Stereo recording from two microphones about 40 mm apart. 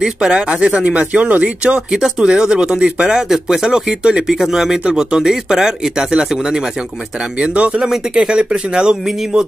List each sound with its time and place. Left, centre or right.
0.0 s speech: centre
1.9 s speech: centre
3.3 s speech: centre
3.6 s speech: centre
7.3 s speech: right